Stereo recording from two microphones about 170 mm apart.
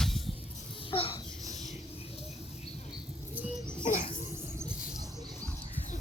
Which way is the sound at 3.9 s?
50° left (ahead or behind).